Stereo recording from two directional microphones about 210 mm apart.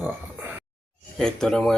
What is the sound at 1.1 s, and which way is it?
Speech, 5° left (ahead or behind).